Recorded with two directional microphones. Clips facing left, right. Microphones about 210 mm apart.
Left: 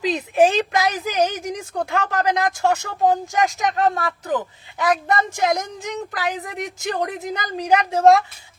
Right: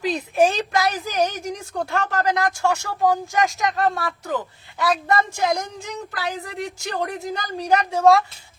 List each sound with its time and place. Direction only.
0.0 s a woman's voice: 20° left (ahead or behind)